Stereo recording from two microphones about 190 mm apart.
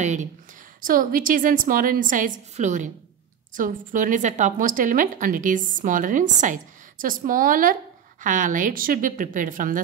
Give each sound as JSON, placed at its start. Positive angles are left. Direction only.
{"t": 0.0, "sound": "a woman's voice", "side_deg": -40}